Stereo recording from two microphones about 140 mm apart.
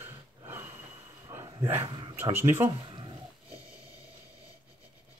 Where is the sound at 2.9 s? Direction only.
35° right (ahead or behind).